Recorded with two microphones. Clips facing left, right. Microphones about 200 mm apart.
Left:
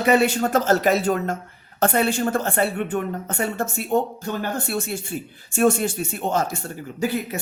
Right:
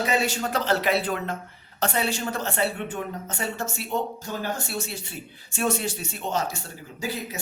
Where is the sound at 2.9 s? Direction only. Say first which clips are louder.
Left 7 dB; 60° left (ahead or behind).